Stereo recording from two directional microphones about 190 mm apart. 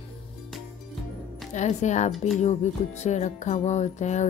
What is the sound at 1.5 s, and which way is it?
Music, 40° left (ahead or behind).